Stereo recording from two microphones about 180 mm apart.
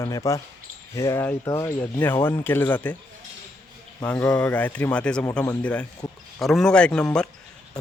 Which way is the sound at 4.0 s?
5° left (ahead or behind).